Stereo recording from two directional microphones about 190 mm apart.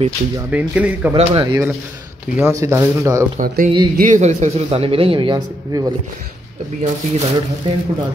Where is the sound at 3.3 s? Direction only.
50° right (ahead or behind); by 5.9 s 20° right (ahead or behind).